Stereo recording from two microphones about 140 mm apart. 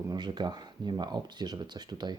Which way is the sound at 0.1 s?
30° right (ahead or behind).